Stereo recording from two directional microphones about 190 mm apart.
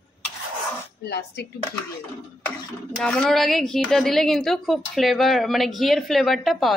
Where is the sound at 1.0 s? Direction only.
60° left (ahead or behind).